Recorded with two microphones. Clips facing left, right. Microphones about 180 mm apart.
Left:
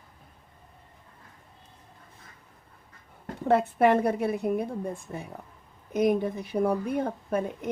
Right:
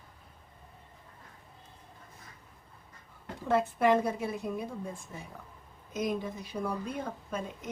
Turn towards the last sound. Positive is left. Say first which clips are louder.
# left 9 dB
turn(degrees=60)  # may be behind; listen again after turning